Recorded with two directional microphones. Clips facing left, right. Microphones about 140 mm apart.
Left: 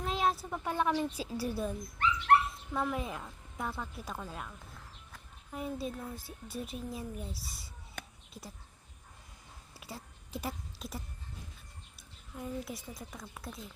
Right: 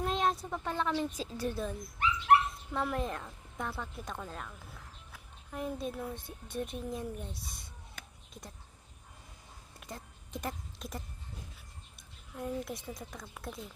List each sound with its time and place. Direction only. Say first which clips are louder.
0.0 s a woman's voice: right 1 dB; 5° left (ahead or behind)
2.0 s dog: left 1 dB; 15° right (ahead or behind)
2.4 s speech: even; centre (ahead or behind)
9.7 s a sound: even; 5° left (ahead or behind)
11.9 s a woman's voice: right 2 dB; centre (ahead or behind)